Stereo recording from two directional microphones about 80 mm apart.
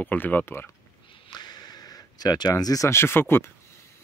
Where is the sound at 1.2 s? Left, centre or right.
Left.